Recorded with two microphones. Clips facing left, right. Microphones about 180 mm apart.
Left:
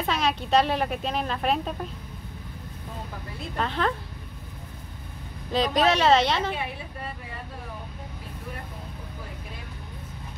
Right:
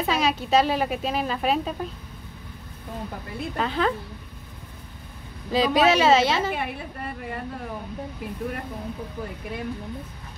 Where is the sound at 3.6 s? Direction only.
5° right (ahead or behind).